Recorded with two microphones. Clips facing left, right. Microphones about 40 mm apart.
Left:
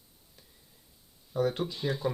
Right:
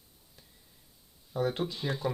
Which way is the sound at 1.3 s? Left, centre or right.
Centre.